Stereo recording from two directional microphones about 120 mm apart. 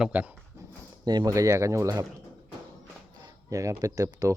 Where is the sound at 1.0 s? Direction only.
35° right (ahead or behind).